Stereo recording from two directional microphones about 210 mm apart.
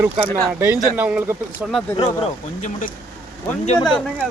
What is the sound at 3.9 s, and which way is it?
Speech, centre (ahead or behind).